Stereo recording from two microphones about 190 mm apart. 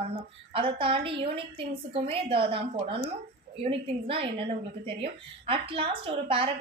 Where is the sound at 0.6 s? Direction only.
30° right (ahead or behind).